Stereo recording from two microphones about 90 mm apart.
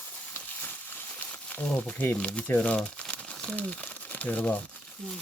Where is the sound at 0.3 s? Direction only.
20° left (ahead or behind).